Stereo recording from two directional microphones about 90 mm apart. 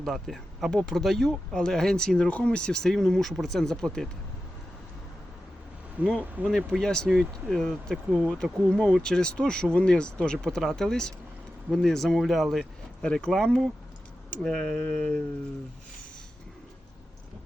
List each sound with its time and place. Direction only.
0.0 s speech: centre (ahead or behind)
6.0 s speech: 15° right (ahead or behind)
6.7 s speech: 5° left (ahead or behind)